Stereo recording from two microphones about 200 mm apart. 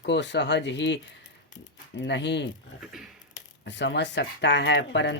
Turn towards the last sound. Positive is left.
turn(degrees=60)  # may be behind; listen again after turning